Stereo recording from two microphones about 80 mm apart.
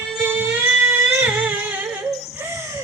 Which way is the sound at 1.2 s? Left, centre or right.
Centre.